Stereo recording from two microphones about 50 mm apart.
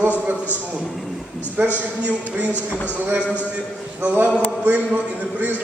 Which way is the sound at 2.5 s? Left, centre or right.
Left.